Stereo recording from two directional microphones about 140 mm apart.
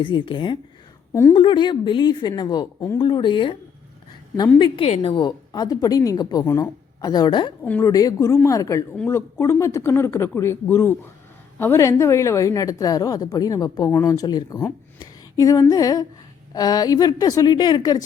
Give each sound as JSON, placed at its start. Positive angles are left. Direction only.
{"t": 0.0, "sound": "a woman's voice", "side_deg": 35}
{"t": 7.6, "sound": "speech", "side_deg": 15}
{"t": 7.9, "sound": "a woman's voice", "side_deg": 25}